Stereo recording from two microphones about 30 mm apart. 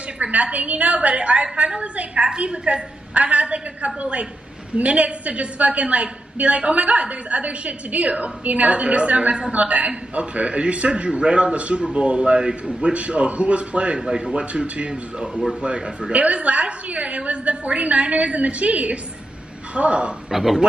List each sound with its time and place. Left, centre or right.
0.2 s a woman's voice: right
0.9 s a woman's voice: right
2.5 s a man's voice: right
3.2 s a woman's voice: right
12.9 s a woman's voice: right
13.9 s speech: right
14.3 s a woman's voice: right
15.6 s a man's voice: right
16.1 s a woman's voice: right
19.7 s a man's voice: right
20.2 s speech: centre